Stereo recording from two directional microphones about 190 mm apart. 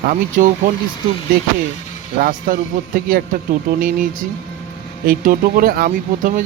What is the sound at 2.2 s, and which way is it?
Speech, 50° right (ahead or behind).